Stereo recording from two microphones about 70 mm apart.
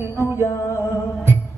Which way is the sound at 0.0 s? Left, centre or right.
Left.